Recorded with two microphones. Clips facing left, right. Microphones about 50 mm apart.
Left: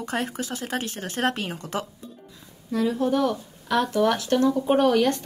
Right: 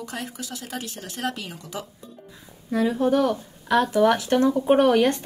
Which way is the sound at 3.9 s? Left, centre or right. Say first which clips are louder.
Right 2 dB; centre.